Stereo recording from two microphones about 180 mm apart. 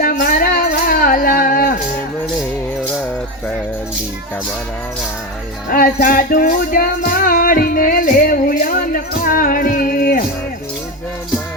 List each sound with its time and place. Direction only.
0.0 s music: 50° left (ahead or behind)
5.6 s music: 55° left (ahead or behind)